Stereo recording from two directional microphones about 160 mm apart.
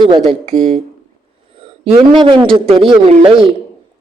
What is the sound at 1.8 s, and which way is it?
Speech, 35° right (ahead or behind).